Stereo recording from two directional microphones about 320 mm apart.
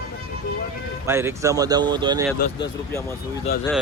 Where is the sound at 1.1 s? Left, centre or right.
Centre.